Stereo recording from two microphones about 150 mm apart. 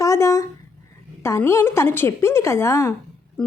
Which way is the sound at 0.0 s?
20° left (ahead or behind).